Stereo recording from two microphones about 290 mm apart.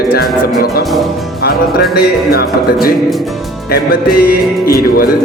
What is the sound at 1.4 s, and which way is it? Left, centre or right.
Speech, left.